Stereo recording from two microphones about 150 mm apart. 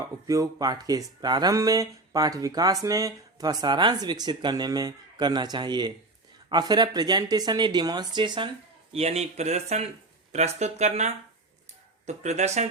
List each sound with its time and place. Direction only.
0.0 s speech: 20° right (ahead or behind)
8.9 s speech: 45° right (ahead or behind)